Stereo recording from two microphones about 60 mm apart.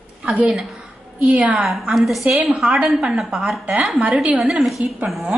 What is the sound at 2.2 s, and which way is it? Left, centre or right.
A woman's voice, centre.